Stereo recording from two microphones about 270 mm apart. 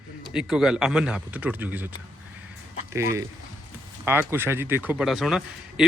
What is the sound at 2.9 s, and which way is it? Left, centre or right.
Speech, centre.